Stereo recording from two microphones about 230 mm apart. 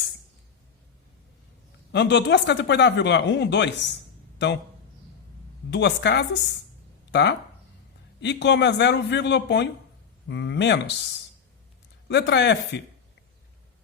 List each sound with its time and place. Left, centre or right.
1.9 s speech: left
5.7 s speech: left
12.0 s speech: left